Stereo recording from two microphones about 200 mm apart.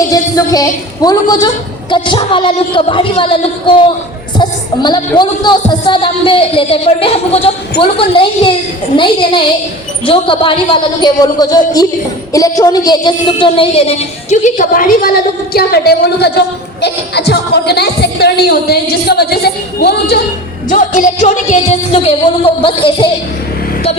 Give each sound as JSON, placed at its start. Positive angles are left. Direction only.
{"t": 0.1, "sound": "a woman's voice", "side_deg": 15}
{"t": 20.7, "sound": "a woman's voice", "side_deg": 40}